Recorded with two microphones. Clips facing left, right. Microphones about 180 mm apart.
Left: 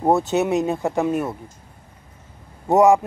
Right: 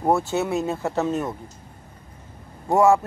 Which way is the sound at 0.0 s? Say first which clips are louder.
Left 3 dB; 20° left (ahead or behind).